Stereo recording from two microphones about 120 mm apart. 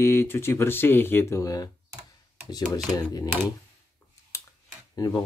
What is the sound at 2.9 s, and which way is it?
Speech, 35° left (ahead or behind).